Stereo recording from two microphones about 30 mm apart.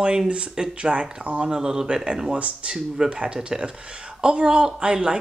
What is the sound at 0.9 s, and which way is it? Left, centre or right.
Speech, right.